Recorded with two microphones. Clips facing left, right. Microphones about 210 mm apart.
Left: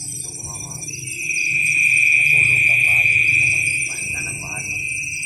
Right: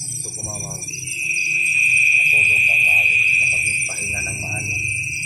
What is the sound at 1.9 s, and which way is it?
Fire alarm, 10° left (ahead or behind).